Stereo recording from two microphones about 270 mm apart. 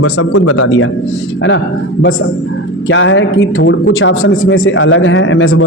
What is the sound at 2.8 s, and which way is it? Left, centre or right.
A man's voice, left.